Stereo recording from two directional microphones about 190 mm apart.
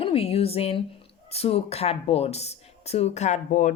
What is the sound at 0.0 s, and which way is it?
A woman's voice, 30° left (ahead or behind).